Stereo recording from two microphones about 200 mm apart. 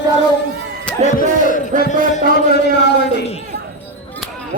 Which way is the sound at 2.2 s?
45° right (ahead or behind).